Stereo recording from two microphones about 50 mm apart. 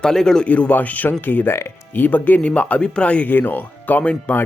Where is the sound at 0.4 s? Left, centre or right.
Left.